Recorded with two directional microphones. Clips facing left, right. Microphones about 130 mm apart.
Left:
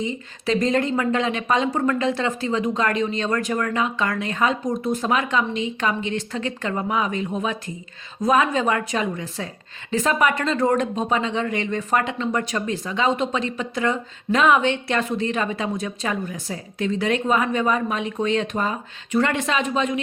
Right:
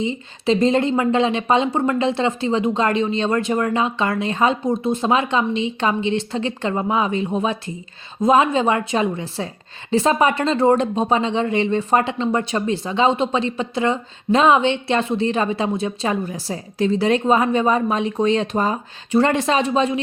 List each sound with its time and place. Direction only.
0.0 s speech: 25° right (ahead or behind)